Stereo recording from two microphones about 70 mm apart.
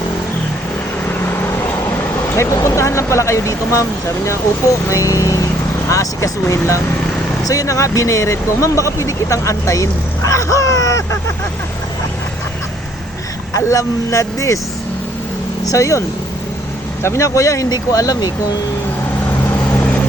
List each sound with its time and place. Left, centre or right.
2.3 s speech: left
13.6 s speech: left
15.6 s speech: left